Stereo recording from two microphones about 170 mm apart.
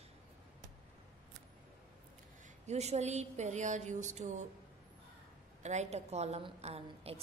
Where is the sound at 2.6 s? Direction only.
40° right (ahead or behind).